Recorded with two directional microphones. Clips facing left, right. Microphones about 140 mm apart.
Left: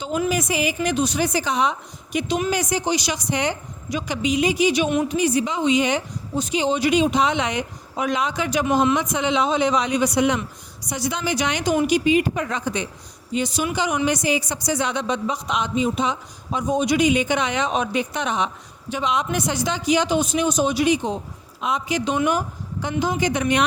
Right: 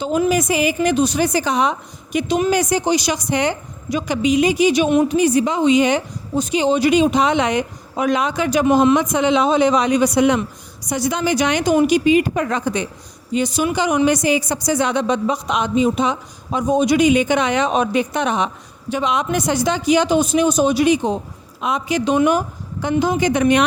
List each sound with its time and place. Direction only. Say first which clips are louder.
0.3 s a woman's voice: right 5 dB; 45° right (ahead or behind)